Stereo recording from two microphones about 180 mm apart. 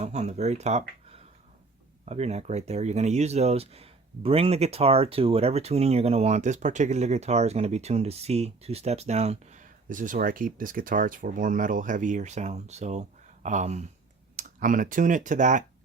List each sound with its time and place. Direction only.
0.0 s speech: 40° right (ahead or behind)